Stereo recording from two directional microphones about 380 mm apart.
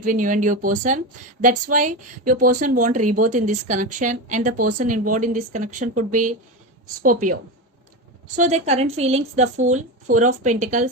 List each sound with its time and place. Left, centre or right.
0.0 s a woman's voice: right
8.4 s a woman's voice: centre